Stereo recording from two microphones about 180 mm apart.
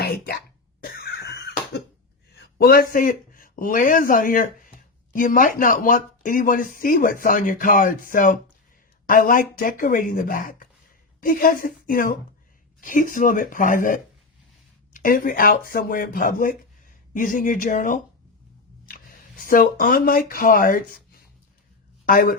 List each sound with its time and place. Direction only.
0.0 s cough: 60° left (ahead or behind)
2.6 s speech: 60° left (ahead or behind)